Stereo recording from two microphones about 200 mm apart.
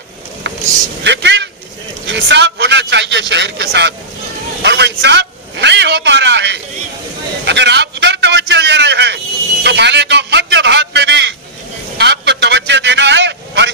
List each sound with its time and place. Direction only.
1.0 s a man's voice: 60° right (ahead or behind)
4.6 s a sound: 60° right (ahead or behind)
12.0 s vehicle: 60° right (ahead or behind)